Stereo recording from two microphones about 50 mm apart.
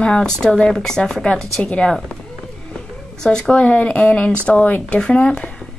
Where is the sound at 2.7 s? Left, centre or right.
Centre.